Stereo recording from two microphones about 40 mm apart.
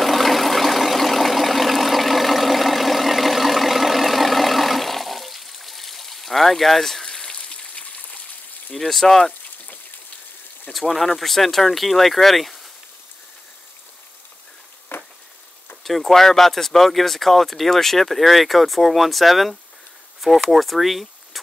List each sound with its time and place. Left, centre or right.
0.0 s vehicle: centre
7.6 s a sound: left
8.7 s speech: centre
10.7 s speech: centre
14.9 s a sound: left
15.8 s speech: centre